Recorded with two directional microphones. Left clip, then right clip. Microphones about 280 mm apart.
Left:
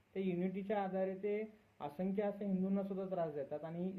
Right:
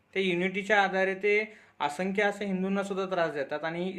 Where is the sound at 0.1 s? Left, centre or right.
Centre.